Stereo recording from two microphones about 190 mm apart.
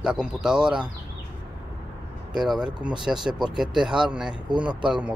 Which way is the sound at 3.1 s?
5° right (ahead or behind).